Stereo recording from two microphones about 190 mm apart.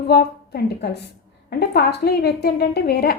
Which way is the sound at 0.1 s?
60° left (ahead or behind).